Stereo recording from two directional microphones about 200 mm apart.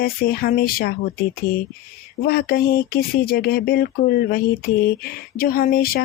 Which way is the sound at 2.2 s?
50° left (ahead or behind).